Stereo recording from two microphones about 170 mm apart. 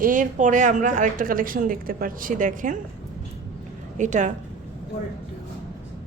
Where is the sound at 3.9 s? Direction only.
45° right (ahead or behind).